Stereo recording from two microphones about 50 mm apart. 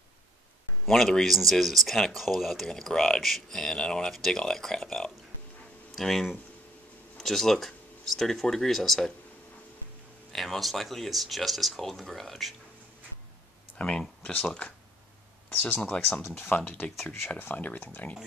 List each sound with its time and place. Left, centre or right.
0.8 s speech: centre
2.6 s speech: centre
10.3 s speech: centre
13.7 s speech: left
15.7 s speech: left
16.2 s speech: left